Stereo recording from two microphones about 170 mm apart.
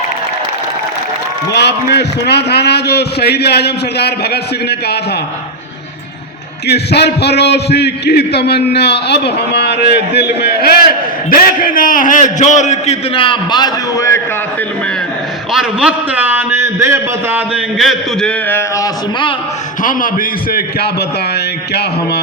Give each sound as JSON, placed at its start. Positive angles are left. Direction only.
{"t": 1.5, "sound": "a man's voice", "side_deg": 80}
{"t": 6.7, "sound": "a man's voice", "side_deg": 75}
{"t": 11.3, "sound": "a man's voice", "side_deg": 55}
{"t": 15.5, "sound": "a man's voice", "side_deg": -5}
{"t": 17.7, "sound": "a man's voice", "side_deg": 0}
{"t": 19.8, "sound": "a man's voice", "side_deg": 50}
{"t": 21.3, "sound": "a sound", "side_deg": 75}